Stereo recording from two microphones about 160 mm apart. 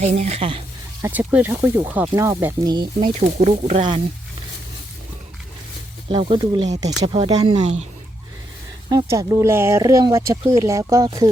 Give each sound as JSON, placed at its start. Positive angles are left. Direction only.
{"t": 0.0, "sound": "speech", "side_deg": -45}
{"t": 1.0, "sound": "speech", "side_deg": -15}
{"t": 2.6, "sound": "speech", "side_deg": -25}
{"t": 3.2, "sound": "speech", "side_deg": -45}
{"t": 6.1, "sound": "speech", "side_deg": -35}
{"t": 8.9, "sound": "speech", "side_deg": -20}